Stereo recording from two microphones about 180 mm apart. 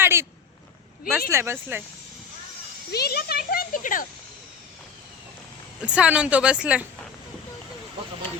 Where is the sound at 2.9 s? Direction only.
60° left (ahead or behind).